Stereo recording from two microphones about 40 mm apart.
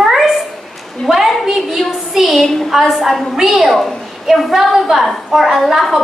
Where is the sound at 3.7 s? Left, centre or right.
Centre.